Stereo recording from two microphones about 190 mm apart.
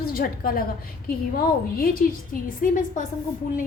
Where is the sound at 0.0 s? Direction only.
50° left (ahead or behind).